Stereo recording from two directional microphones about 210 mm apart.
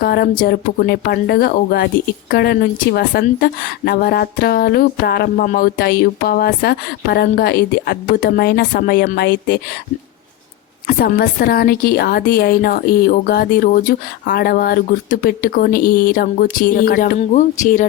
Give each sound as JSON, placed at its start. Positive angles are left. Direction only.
{"t": 0.0, "sound": "a woman's voice", "side_deg": 45}
{"t": 10.8, "sound": "a woman's voice", "side_deg": 45}